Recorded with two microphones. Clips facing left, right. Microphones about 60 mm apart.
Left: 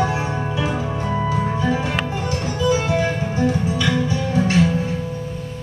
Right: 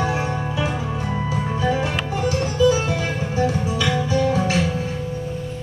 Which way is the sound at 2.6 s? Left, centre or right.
Left.